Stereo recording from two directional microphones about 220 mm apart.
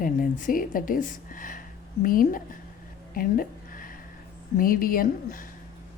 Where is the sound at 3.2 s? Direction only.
40° left (ahead or behind).